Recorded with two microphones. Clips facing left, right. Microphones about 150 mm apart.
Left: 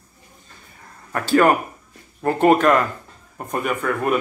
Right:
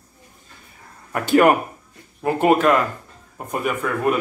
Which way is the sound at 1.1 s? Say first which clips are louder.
Right 1 dB; 20° right (ahead or behind).